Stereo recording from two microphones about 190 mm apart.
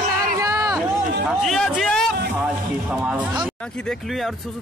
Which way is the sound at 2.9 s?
5° right (ahead or behind).